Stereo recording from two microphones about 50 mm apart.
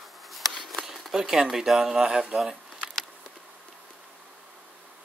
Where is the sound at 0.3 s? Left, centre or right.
Centre.